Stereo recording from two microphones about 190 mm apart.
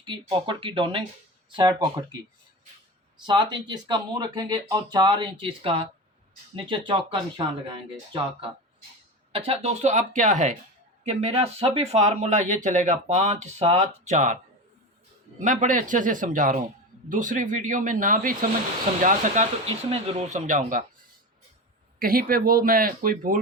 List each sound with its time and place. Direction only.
0.0 s speech: 25° right (ahead or behind)
3.2 s speech: 25° right (ahead or behind); by 14.3 s 40° right (ahead or behind)
15.4 s speech: 40° right (ahead or behind)
21.9 s speech: 50° right (ahead or behind)